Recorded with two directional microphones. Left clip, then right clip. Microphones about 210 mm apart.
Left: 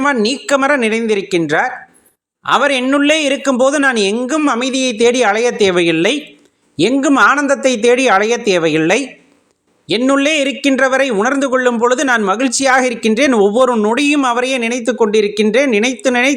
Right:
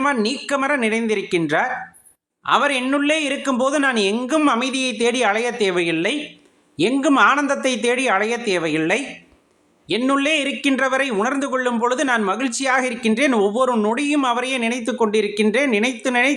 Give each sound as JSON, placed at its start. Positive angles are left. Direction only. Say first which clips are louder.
{"t": 0.0, "sound": "speech", "louder": "left 6 dB", "side_deg": 30}